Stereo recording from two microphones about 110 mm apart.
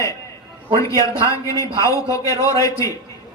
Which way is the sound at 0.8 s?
30° left (ahead or behind).